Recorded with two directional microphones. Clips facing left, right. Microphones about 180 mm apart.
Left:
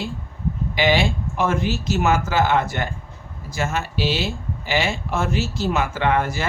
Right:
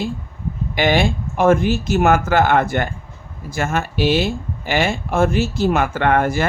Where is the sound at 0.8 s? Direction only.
50° right (ahead or behind).